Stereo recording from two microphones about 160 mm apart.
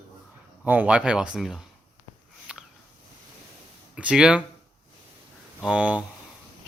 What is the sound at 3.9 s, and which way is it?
Speech, 5° right (ahead or behind).